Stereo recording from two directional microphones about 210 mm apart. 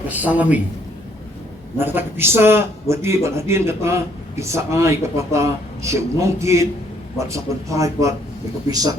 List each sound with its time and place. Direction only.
0.1 s a man's voice: 5° right (ahead or behind)
1.8 s a man's voice: 10° right (ahead or behind)